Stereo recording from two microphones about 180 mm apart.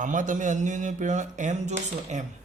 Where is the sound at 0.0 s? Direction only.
45° right (ahead or behind).